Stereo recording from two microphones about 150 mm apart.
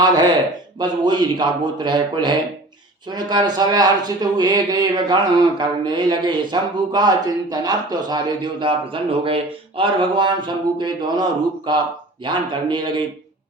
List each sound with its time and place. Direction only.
0.0 s a man's voice: 30° right (ahead or behind)